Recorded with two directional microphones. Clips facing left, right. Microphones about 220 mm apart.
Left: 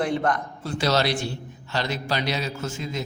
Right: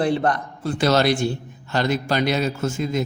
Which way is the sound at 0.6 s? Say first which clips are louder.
Right 5 dB; 50° right (ahead or behind).